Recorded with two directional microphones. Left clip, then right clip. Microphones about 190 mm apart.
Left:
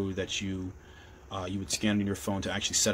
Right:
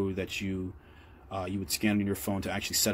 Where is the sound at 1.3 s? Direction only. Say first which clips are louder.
Even; 5° right (ahead or behind).